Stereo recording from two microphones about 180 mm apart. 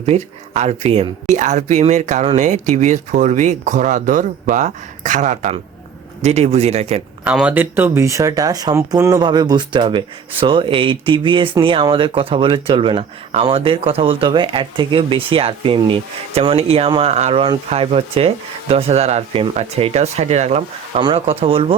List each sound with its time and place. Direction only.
0.0 s speech: 35° right (ahead or behind)
7.3 s speech: 5° right (ahead or behind); by 21.8 s 30° right (ahead or behind)